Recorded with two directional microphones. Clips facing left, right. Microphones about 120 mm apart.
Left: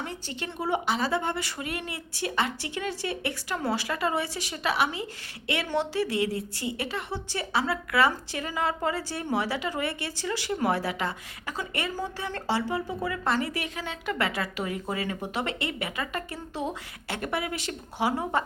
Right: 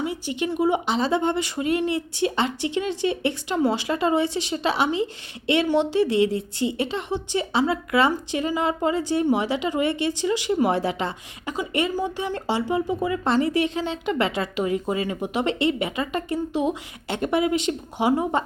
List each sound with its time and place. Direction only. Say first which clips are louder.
0.0 s a woman's voice: right 9 dB; 10° right (ahead or behind)